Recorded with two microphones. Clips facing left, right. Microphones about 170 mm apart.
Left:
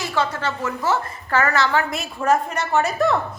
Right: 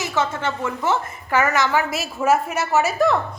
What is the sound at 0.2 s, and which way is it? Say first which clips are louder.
A woman's voice: even; 20° right (ahead or behind).